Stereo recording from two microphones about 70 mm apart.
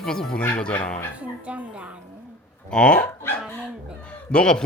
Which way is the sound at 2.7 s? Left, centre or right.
Centre.